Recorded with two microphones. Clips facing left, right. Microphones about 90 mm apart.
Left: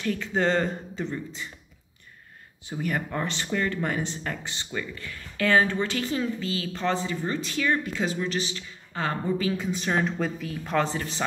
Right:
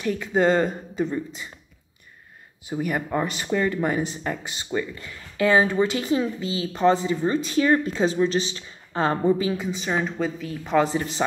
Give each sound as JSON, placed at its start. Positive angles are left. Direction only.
{"t": 0.0, "sound": "speech", "side_deg": -15}
{"t": 2.7, "sound": "speech", "side_deg": -15}
{"t": 7.5, "sound": "speech", "side_deg": -30}
{"t": 9.6, "sound": "speech", "side_deg": -5}